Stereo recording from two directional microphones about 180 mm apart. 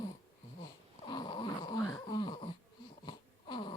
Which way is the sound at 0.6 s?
25° left (ahead or behind).